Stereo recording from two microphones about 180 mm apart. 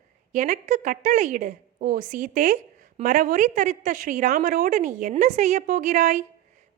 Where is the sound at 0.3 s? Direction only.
45° right (ahead or behind).